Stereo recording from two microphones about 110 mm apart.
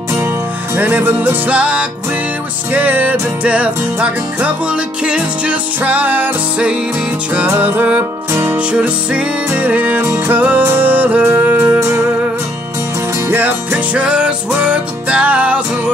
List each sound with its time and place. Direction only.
0.7 s music: 20° right (ahead or behind)
13.3 s music: 15° right (ahead or behind)